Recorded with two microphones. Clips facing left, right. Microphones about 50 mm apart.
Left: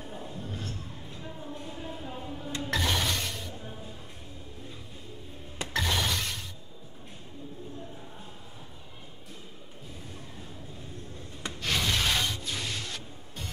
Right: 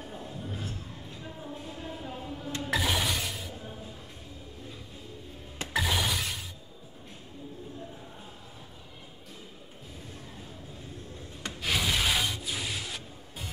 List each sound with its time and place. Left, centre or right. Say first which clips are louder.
0.0 s a sound: even; centre
2.6 s music: even; centre
5.7 s shatter: right 1 dB; centre
11.6 s music: even; centre